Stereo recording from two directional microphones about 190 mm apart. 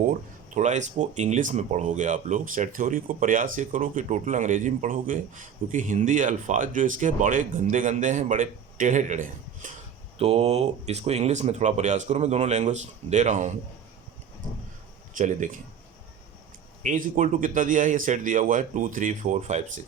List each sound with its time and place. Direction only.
0.1 s speech: 40° right (ahead or behind)
15.1 s speech: 40° right (ahead or behind)
16.8 s speech: 40° right (ahead or behind)